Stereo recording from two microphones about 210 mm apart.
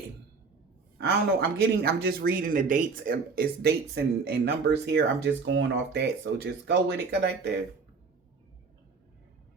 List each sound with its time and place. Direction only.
0.9 s speech: 50° right (ahead or behind)